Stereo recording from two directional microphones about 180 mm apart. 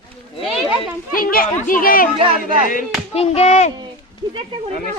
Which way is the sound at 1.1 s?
55° left (ahead or behind).